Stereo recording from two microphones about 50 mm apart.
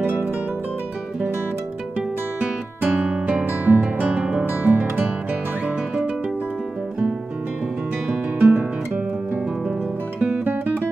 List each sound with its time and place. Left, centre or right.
0.0 s music: right
3.1 s guitar: right
3.4 s guitar: right
4.0 s music: right
8.4 s guitar: right